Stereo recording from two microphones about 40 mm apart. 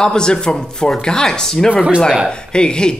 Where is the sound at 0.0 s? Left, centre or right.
Centre.